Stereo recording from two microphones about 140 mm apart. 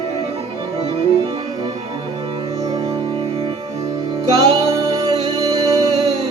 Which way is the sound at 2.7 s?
25° right (ahead or behind).